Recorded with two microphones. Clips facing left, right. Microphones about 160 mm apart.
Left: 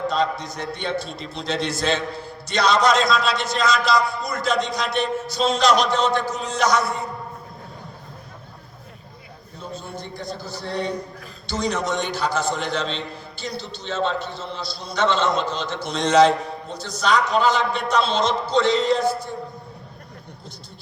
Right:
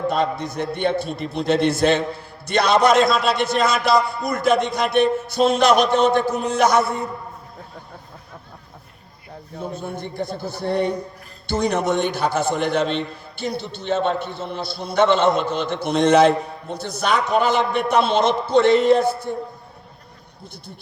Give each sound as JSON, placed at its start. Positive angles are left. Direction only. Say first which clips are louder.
{"t": 0.1, "sound": "a man's voice", "louder": "right 2 dB", "side_deg": -55}
{"t": 9.6, "sound": "a man's voice", "louder": "right 5 dB", "side_deg": -55}